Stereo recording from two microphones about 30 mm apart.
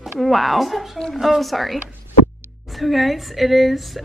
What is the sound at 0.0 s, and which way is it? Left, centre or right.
A woman's voice, centre.